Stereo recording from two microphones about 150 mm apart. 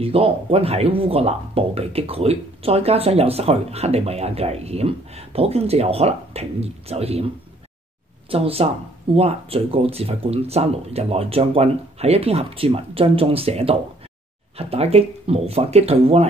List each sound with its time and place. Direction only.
0.0 s speech: 40° right (ahead or behind)
8.3 s speech: 40° right (ahead or behind)